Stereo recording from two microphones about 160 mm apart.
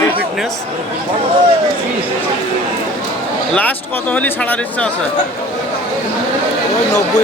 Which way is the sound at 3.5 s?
10° left (ahead or behind).